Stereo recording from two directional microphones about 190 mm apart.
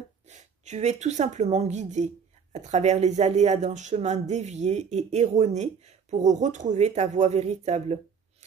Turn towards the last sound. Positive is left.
turn(degrees=-35)  # may be behind; listen again after turning